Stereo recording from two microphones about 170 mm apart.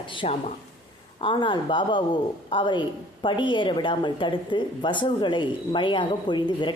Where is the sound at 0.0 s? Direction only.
30° left (ahead or behind).